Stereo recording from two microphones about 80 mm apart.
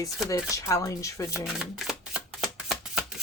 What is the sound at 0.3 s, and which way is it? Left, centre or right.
Speech, left.